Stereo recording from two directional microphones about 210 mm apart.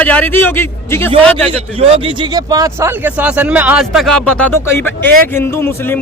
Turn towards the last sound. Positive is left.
turn(degrees=10)  # may be behind; listen again after turning